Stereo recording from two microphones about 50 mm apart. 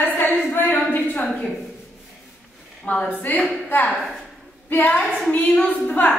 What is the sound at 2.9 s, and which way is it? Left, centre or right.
Speech, left.